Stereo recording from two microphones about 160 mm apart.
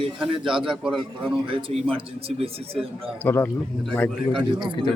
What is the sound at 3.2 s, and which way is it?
A man's voice, 15° left (ahead or behind).